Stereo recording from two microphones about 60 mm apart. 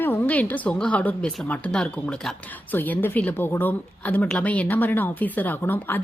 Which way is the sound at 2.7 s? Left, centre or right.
Left.